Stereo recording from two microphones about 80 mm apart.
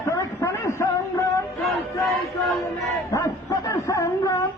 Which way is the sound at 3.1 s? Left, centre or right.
Left.